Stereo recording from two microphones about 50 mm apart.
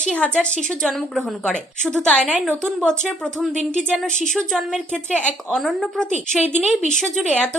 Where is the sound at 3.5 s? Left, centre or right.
Centre.